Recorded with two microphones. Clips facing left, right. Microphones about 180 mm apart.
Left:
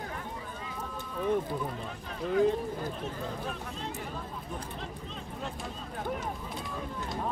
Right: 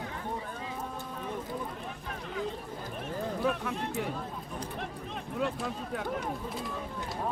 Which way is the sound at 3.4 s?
65° right (ahead or behind).